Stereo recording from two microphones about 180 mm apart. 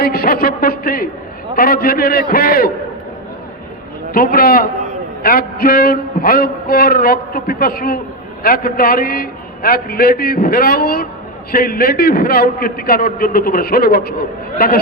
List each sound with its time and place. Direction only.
0.0 s a sound: 60° left (ahead or behind)
1.5 s a man's voice: 55° left (ahead or behind)
4.1 s a man's voice: 55° left (ahead or behind)